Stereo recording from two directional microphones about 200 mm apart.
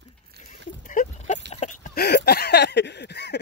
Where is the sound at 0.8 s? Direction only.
40° left (ahead or behind).